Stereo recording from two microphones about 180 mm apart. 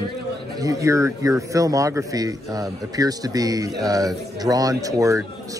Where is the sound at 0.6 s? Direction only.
20° right (ahead or behind).